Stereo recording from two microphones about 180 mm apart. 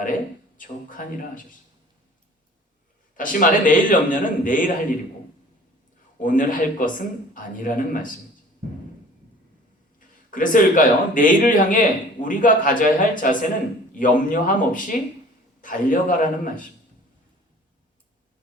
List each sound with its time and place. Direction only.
0.5 s speech: 50° left (ahead or behind)
3.2 s speech: 50° left (ahead or behind)
6.2 s speech: 50° left (ahead or behind)
10.0 s speech: 50° left (ahead or behind)